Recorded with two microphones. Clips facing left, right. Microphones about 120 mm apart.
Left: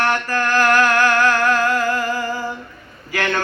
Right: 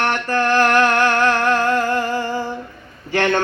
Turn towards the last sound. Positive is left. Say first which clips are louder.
# right 4 dB
turn(degrees=-25)  # may be behind; listen again after turning